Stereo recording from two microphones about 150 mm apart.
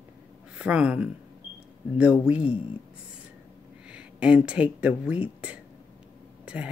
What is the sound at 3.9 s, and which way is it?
Speech, 5° right (ahead or behind).